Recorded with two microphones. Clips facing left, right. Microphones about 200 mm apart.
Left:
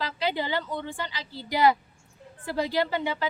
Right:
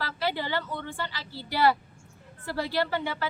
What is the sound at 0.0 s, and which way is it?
A woman's voice, 15° left (ahead or behind).